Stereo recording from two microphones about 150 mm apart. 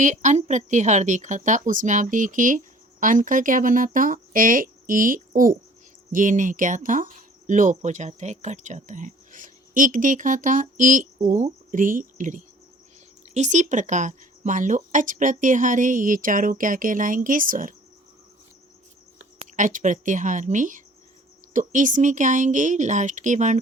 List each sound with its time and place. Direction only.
0.0 s speech: 55° right (ahead or behind)
19.5 s speech: 60° right (ahead or behind)